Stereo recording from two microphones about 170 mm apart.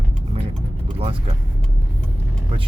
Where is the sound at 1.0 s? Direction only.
35° right (ahead or behind).